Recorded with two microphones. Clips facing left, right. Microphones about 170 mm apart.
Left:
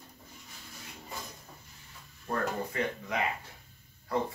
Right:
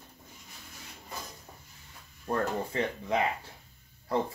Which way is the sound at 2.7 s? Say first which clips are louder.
Right 2 dB; 25° right (ahead or behind).